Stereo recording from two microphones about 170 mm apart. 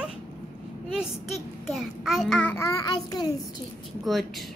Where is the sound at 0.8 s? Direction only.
5° right (ahead or behind); by 3.3 s 20° left (ahead or behind).